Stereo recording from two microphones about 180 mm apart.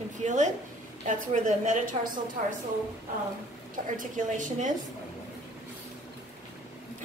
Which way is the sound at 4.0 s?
45° right (ahead or behind).